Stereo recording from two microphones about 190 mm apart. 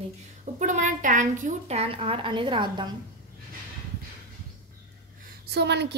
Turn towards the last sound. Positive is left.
turn(degrees=-65)  # may be behind; listen again after turning